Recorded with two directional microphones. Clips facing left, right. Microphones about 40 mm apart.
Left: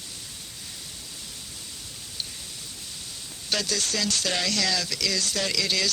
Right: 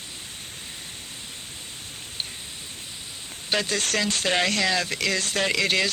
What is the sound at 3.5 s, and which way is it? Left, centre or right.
Speech, right.